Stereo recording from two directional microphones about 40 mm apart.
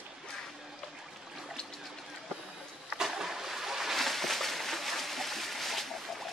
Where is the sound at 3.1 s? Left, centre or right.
Centre.